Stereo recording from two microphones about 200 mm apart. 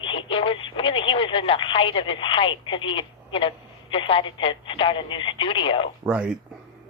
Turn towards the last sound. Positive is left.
turn(degrees=-5)  # may be behind; listen again after turning